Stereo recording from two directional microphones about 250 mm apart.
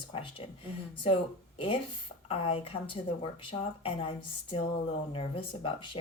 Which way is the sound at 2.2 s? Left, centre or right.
Left.